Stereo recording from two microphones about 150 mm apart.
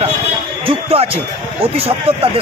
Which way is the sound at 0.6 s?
40° right (ahead or behind).